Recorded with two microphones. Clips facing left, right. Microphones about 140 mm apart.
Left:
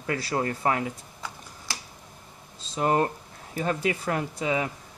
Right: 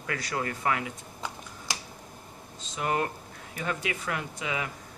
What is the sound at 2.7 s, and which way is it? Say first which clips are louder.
Speech: left 5 dB; 35° left (ahead or behind).